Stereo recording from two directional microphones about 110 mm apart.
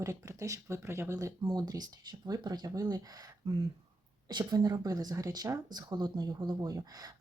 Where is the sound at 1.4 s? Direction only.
40° right (ahead or behind).